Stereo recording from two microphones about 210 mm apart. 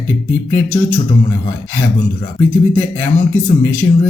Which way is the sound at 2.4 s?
10° left (ahead or behind).